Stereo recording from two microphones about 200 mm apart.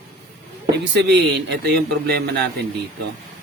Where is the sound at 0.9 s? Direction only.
60° right (ahead or behind).